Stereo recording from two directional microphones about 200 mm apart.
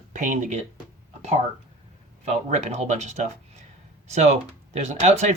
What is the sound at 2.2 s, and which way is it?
Speech, 35° right (ahead or behind).